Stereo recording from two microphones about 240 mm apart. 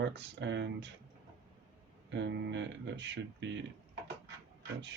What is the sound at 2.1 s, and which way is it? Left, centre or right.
Speech, right.